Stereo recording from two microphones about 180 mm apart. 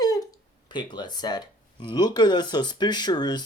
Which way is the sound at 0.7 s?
25° left (ahead or behind).